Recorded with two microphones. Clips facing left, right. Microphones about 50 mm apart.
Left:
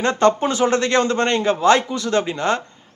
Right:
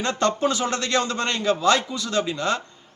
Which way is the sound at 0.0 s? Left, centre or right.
Left.